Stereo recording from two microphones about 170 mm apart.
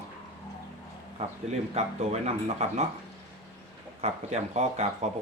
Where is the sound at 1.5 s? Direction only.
40° right (ahead or behind).